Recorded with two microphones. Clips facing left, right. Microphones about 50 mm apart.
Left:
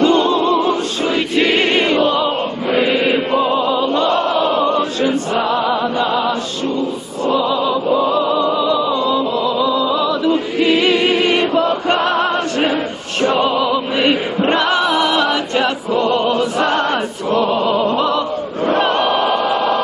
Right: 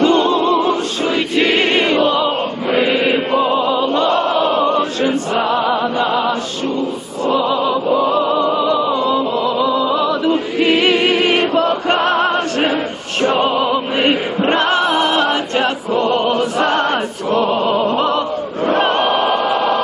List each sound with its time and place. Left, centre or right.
0.0 s music: centre
4.3 s choir: centre
5.0 s chant: centre
5.5 s music: right
7.3 s opera: right
7.9 s music: right
11.7 s music: centre
13.6 s opera: right
13.9 s chant: centre
14.4 s music: centre
14.8 s music: right
16.7 s choir: centre
17.3 s opera: right
18.8 s a sound: right